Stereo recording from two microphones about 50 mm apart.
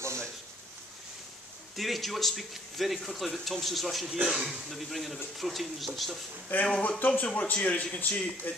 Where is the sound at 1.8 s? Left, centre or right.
Centre.